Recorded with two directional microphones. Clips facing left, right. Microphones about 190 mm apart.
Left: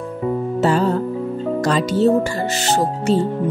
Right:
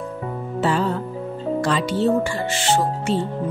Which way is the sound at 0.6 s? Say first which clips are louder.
Left 3 dB; 40° left (ahead or behind).